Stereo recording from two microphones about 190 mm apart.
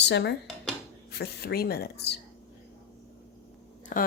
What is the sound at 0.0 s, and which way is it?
Speech, 65° left (ahead or behind).